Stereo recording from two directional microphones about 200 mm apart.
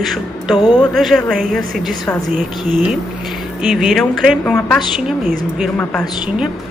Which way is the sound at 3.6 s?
Centre (ahead or behind).